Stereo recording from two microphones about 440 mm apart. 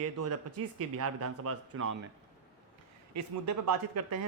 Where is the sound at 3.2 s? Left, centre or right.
Right.